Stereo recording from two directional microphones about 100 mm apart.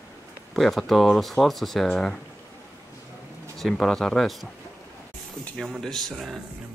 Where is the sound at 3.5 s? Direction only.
5° left (ahead or behind).